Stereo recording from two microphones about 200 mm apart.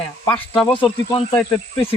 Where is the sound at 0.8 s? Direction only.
20° left (ahead or behind).